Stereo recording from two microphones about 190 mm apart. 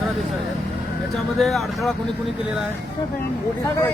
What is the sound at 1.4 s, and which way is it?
Speech, centre (ahead or behind).